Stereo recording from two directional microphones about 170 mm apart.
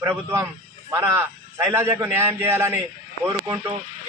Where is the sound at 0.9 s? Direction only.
15° right (ahead or behind).